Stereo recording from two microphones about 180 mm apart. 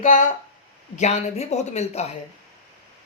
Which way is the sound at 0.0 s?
45° left (ahead or behind).